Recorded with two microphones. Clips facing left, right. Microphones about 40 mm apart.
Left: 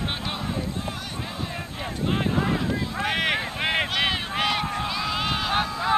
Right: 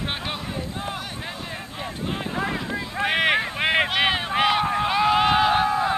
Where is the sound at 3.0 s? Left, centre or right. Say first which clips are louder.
Right 5 dB; centre.